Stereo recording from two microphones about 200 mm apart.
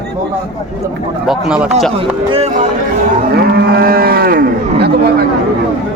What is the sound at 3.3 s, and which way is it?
Moo, 50° right (ahead or behind).